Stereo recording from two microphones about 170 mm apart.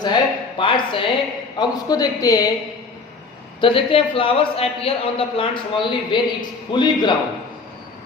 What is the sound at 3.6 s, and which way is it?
A man's voice, 30° left (ahead or behind).